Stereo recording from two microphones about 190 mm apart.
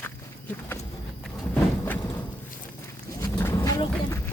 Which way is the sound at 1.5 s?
10° left (ahead or behind).